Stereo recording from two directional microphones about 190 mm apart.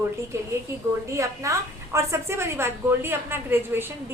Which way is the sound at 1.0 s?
15° right (ahead or behind).